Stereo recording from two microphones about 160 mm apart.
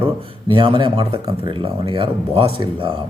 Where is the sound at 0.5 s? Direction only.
30° right (ahead or behind).